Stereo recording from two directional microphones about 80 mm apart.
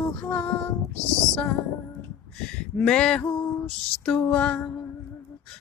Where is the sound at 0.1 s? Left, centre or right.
Centre.